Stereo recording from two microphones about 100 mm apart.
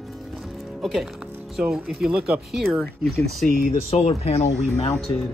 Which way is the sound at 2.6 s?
Centre (ahead or behind).